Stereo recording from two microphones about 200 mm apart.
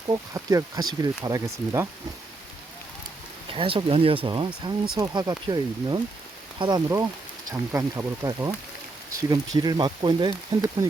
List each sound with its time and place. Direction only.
0.1 s speech: 15° right (ahead or behind)
3.5 s speech: 25° right (ahead or behind)